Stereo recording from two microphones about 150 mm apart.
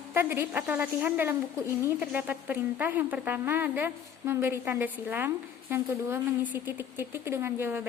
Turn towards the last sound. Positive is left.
turn(degrees=-15)  # may be behind; listen again after turning